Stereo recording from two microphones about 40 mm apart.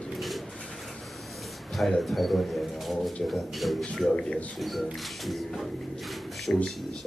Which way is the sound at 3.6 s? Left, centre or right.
Centre.